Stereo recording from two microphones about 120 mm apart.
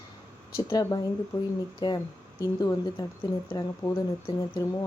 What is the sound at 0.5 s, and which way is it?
A woman's voice, 35° left (ahead or behind).